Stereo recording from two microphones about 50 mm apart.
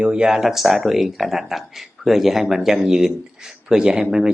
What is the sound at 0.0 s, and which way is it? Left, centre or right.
Speech, right.